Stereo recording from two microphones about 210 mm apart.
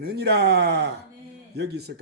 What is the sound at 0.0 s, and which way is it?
Speech, 50° right (ahead or behind).